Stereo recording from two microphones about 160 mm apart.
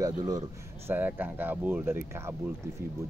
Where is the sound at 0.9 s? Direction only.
10° right (ahead or behind).